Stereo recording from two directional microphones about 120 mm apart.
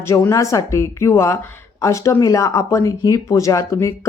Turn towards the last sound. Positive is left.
turn(degrees=25)  # may be behind; listen again after turning